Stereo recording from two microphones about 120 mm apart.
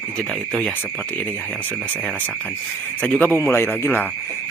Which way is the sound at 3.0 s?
10° left (ahead or behind).